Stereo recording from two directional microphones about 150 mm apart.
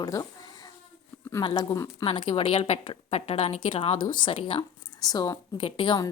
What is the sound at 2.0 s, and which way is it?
A woman's voice, 35° left (ahead or behind).